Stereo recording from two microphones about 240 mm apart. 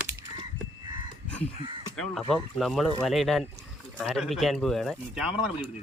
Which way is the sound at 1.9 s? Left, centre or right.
Centre.